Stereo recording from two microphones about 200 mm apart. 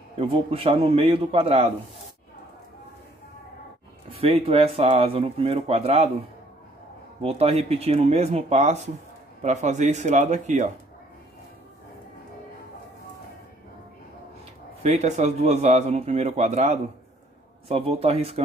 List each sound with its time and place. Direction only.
0.2 s speech: 30° right (ahead or behind)
4.1 s speech: 30° right (ahead or behind)
7.2 s a man's voice: 30° right (ahead or behind)
14.8 s a man's voice: 35° right (ahead or behind)